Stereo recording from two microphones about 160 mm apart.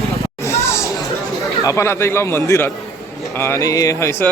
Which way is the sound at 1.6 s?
20° left (ahead or behind).